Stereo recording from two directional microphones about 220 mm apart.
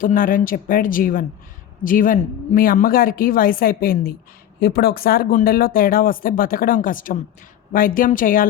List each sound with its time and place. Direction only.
0.0 s speech: 40° left (ahead or behind)